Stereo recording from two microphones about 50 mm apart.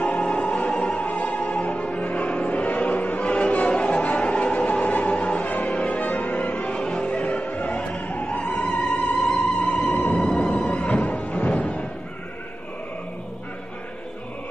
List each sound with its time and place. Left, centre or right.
0.0 s music: left
10.2 s music: centre